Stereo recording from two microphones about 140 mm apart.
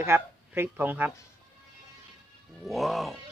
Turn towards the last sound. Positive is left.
turn(degrees=0)  # may be behind; listen again after turning